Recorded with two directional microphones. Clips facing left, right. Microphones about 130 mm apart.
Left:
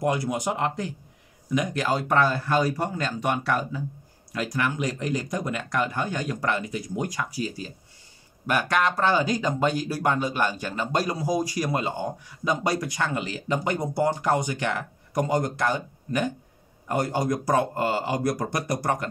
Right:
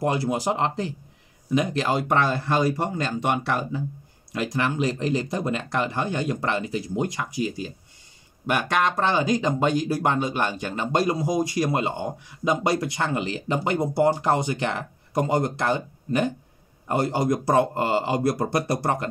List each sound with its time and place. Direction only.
0.0 s speech: 30° right (ahead or behind)